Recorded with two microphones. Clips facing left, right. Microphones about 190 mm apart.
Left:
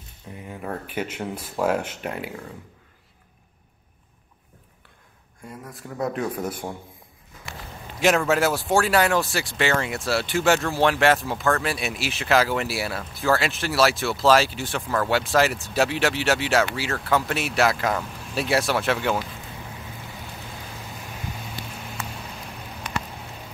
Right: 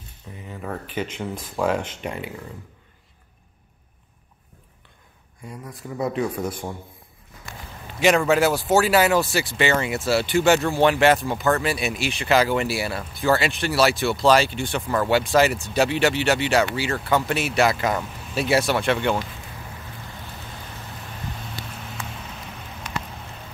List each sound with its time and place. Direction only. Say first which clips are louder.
0.5 s speech: even; 10° left (ahead or behind)
5.4 s speech: right 2 dB; centre (ahead or behind)
8.0 s speech: right 2 dB; centre (ahead or behind)
20.7 s vehicle: even; centre (ahead or behind)